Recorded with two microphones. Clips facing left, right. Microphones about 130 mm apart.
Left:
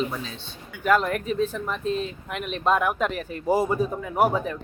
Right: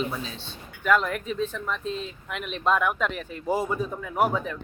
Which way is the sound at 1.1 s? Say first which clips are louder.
Left 4 dB; 50° left (ahead or behind).